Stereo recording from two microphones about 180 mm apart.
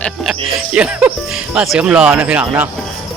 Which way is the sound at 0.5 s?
5° right (ahead or behind).